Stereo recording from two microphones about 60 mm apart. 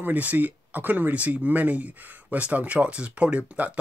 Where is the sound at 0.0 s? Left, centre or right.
Right.